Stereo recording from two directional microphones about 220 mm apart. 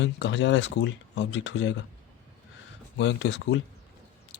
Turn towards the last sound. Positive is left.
turn(degrees=55)  # may be behind; listen again after turning